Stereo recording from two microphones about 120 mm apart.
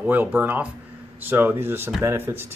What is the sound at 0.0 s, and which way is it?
Speech, 15° right (ahead or behind).